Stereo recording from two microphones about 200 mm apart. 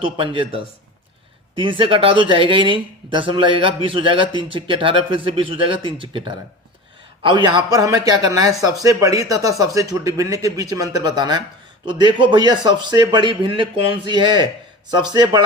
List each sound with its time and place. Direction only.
0.0 s a man's voice: 25° right (ahead or behind)